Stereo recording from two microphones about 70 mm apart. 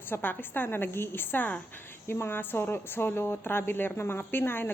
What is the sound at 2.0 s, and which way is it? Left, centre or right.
A woman's voice, left.